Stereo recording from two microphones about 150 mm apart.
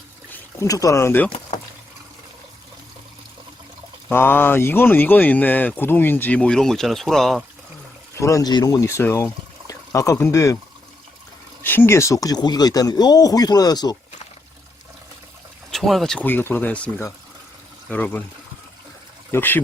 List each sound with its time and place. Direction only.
0.3 s speech: 20° left (ahead or behind)
4.1 s speech: 15° left (ahead or behind)
8.1 s speech: 20° left (ahead or behind)
11.6 s speech: 15° left (ahead or behind)
15.7 s speech: centre (ahead or behind)
19.3 s speech: 15° left (ahead or behind)